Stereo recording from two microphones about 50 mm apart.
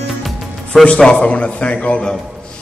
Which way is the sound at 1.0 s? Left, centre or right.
Centre.